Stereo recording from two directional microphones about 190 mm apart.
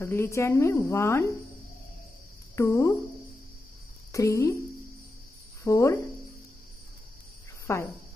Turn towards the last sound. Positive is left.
turn(degrees=15)  # may be behind; listen again after turning